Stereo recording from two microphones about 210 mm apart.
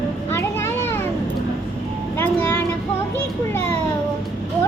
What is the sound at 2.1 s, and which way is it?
Vehicle, 10° left (ahead or behind).